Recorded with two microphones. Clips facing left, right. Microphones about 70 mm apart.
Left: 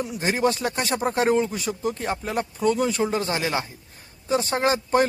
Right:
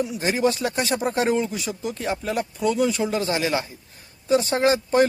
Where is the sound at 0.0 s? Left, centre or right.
Left.